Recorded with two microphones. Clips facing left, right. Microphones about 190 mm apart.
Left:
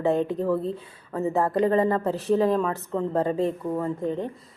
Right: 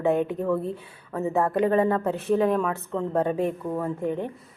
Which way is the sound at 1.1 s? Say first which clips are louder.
Even; centre (ahead or behind).